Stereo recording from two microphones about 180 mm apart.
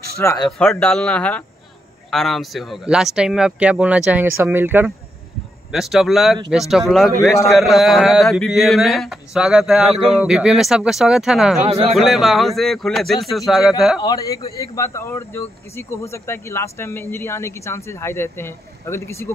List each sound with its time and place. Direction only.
0.2 s speech: 15° left (ahead or behind)
0.5 s speech: centre (ahead or behind)
7.4 s speech: centre (ahead or behind)
11.6 s speech: 35° right (ahead or behind)
11.9 s speech: centre (ahead or behind)
14.0 s a man's voice: 20° left (ahead or behind)